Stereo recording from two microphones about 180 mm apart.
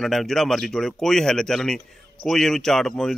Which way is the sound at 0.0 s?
Centre (ahead or behind).